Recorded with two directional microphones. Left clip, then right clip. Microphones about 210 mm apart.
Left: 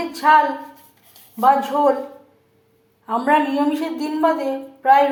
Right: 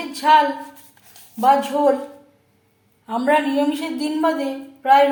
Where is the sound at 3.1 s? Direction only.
Centre (ahead or behind).